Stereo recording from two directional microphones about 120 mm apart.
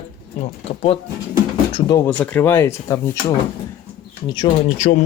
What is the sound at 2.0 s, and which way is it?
Speech, 10° left (ahead or behind).